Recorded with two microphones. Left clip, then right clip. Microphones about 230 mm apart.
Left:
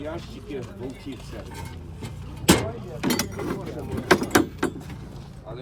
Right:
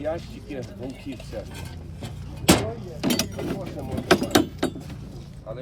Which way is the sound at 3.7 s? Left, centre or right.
Centre.